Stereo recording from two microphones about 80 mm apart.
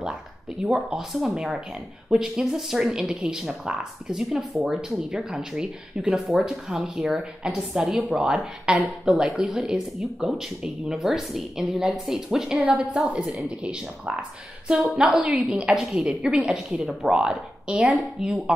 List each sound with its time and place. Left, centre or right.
0.6 s speech: centre
12.5 s a woman's voice: centre
14.7 s speech: centre